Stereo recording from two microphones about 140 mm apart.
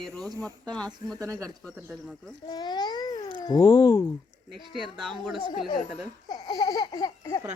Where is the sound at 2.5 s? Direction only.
30° left (ahead or behind).